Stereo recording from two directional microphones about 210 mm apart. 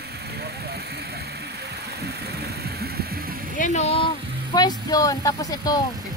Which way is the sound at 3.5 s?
35° left (ahead or behind).